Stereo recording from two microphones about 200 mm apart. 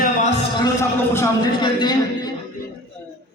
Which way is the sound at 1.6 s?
20° left (ahead or behind).